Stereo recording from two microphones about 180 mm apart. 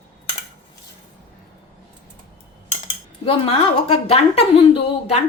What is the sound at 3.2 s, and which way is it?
A woman's voice, 30° left (ahead or behind).